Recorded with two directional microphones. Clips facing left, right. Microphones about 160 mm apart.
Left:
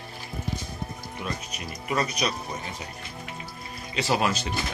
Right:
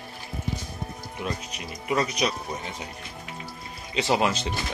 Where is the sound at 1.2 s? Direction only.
20° right (ahead or behind).